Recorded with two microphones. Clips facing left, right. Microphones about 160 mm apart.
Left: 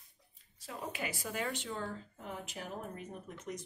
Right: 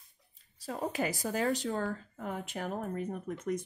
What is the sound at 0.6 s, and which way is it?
Speech, 40° right (ahead or behind).